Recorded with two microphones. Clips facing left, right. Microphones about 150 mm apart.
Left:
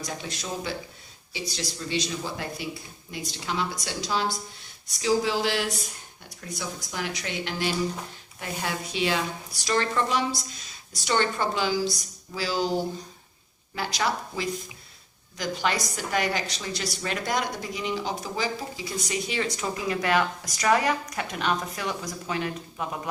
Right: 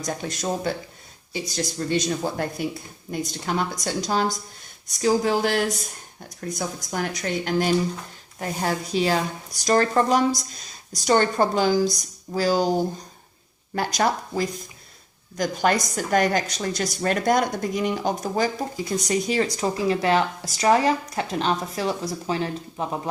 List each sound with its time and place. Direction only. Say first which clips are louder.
0.0 s a woman's voice: right 7 dB; 45° right (ahead or behind)
13.7 s a woman's voice: right 5 dB; 50° right (ahead or behind); by 23.0 s 30° right (ahead or behind)